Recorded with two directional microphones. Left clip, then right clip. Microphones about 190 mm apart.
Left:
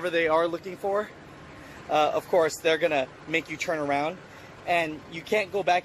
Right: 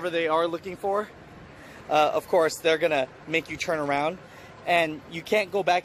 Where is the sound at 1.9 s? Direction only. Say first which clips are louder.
Right 2 dB; 20° right (ahead or behind).